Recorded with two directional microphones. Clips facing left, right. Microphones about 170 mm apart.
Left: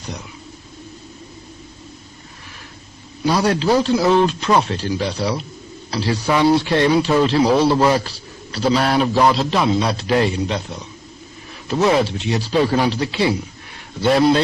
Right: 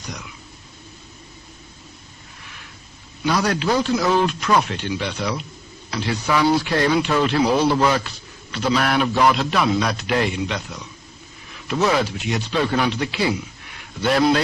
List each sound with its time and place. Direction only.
3.2 s speech: 30° left (ahead or behind)